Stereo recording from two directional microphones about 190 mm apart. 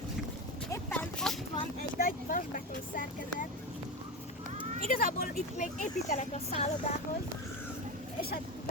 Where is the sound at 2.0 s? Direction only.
45° left (ahead or behind).